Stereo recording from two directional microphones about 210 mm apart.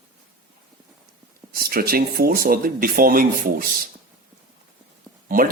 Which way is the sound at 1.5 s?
45° right (ahead or behind).